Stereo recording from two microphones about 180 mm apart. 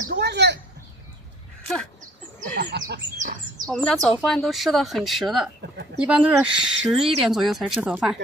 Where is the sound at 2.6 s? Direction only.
70° right (ahead or behind).